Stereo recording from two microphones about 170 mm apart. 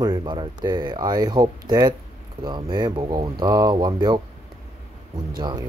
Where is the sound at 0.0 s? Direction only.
25° right (ahead or behind).